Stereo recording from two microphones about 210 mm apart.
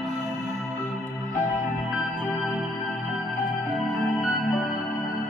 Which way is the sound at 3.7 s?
Centre (ahead or behind).